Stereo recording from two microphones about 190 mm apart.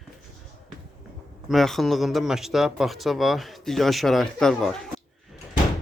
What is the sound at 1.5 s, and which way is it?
Speech, centre (ahead or behind).